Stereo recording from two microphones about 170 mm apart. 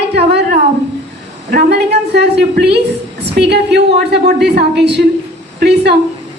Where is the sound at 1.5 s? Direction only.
70° right (ahead or behind).